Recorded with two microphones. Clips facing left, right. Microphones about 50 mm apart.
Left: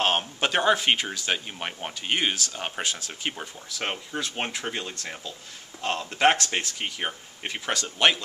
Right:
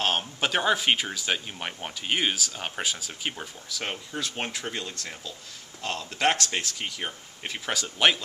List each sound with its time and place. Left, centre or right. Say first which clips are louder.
0.0 s speech: left 2 dB; centre
3.8 s speech: left 3 dB; centre
7.7 s speech: left 1 dB; centre